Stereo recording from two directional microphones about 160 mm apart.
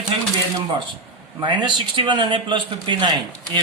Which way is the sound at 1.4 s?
30° right (ahead or behind).